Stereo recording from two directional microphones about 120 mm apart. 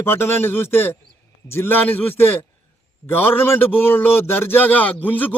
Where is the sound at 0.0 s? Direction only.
20° left (ahead or behind).